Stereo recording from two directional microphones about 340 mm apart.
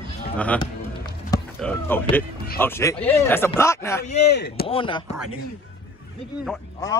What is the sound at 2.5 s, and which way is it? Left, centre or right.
Speech, centre.